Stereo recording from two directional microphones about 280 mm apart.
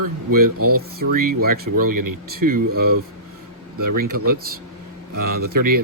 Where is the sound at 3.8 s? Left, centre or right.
Right.